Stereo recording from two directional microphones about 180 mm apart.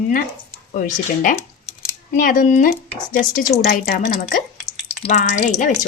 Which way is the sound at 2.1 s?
45° left (ahead or behind).